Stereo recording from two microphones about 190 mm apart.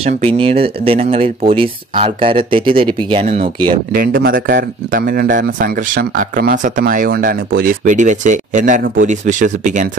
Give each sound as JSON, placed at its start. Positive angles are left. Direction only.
{"t": 0.4, "sound": "speech", "side_deg": -30}
{"t": 3.9, "sound": "speech", "side_deg": -50}